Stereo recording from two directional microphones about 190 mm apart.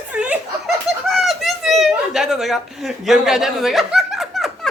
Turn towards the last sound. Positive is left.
turn(degrees=0)  # may be behind; listen again after turning